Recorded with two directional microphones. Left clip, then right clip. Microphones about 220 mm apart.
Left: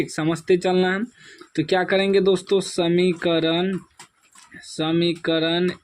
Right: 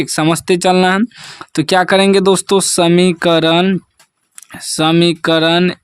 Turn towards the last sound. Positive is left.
turn(degrees=-50)  # may be behind; listen again after turning